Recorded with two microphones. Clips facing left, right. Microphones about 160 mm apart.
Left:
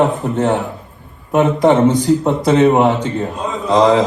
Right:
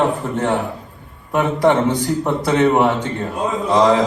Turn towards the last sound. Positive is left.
turn(degrees=20)  # may be behind; listen again after turning